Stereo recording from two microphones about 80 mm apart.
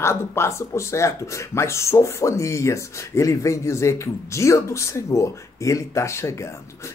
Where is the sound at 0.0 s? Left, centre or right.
Left.